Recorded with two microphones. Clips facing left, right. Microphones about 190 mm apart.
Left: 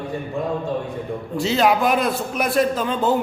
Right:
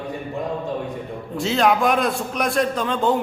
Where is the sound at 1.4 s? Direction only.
Centre (ahead or behind).